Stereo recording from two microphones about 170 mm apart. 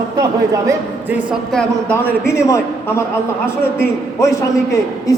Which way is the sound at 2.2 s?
15° left (ahead or behind).